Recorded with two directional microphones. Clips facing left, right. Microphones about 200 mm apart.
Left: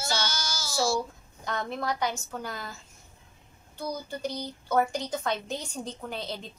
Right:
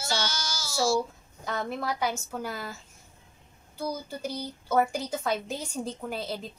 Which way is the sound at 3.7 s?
5° right (ahead or behind).